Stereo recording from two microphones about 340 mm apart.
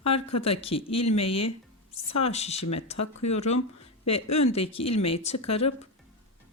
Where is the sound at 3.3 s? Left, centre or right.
Centre.